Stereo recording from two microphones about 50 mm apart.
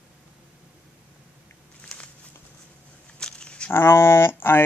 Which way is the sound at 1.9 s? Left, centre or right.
Centre.